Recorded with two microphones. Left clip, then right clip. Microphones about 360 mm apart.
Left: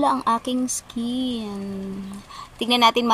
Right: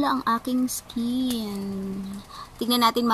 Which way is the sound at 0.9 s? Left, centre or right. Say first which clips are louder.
Even; centre.